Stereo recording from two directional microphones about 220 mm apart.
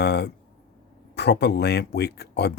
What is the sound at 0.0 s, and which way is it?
Speech, 50° left (ahead or behind).